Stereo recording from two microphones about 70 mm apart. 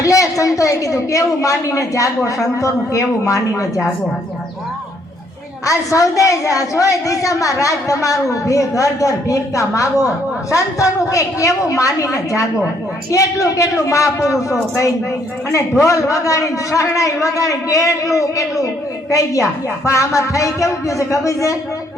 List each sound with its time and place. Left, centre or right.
0.0 s a woman's voice: left
5.6 s a woman's voice: left
15.8 s a woman's voice: left